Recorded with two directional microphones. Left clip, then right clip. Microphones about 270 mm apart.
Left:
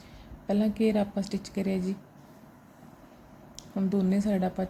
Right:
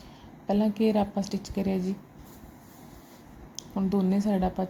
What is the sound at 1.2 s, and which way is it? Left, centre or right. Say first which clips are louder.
Speech: right 1 dB; left.